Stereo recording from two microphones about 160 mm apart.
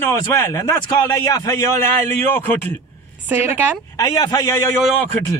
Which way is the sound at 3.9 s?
25° left (ahead or behind).